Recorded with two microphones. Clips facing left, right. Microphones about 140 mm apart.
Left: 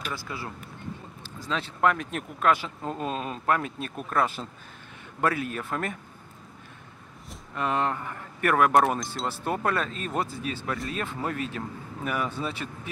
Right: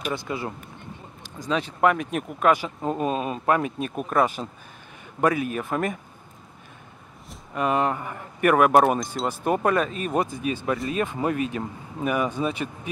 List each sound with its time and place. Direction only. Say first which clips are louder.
0.0 s speech: right 6 dB; 20° right (ahead or behind)
7.5 s speech: right 4 dB; 10° right (ahead or behind)
9.3 s speech: right 6 dB; 15° right (ahead or behind)